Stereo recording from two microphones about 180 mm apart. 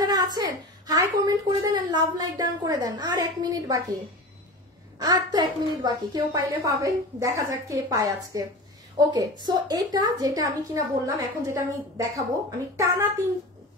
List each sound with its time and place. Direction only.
0.0 s a woman's voice: 20° right (ahead or behind)
4.9 s a woman's voice: 20° right (ahead or behind)